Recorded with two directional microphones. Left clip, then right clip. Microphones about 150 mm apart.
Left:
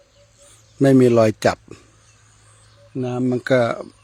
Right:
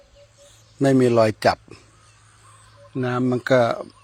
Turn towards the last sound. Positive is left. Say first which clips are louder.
# even
turn(degrees=35)  # may be behind; listen again after turning